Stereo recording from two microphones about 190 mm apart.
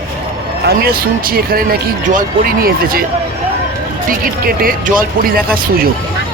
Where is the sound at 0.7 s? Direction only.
50° right (ahead or behind).